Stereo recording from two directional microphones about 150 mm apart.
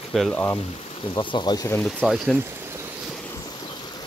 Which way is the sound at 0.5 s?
35° left (ahead or behind).